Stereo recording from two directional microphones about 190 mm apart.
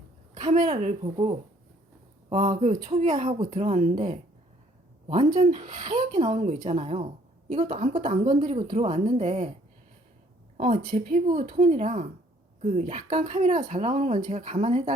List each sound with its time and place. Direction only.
0.5 s a woman's voice: 40° right (ahead or behind)
5.5 s speech: 40° right (ahead or behind)
5.8 s a woman's voice: 25° right (ahead or behind)
6.3 s speech: 40° right (ahead or behind)
10.6 s speech: 35° right (ahead or behind)